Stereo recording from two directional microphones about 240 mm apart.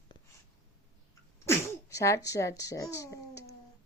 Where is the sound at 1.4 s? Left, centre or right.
Centre.